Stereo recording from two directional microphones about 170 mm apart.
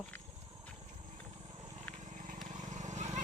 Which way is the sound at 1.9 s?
45° right (ahead or behind).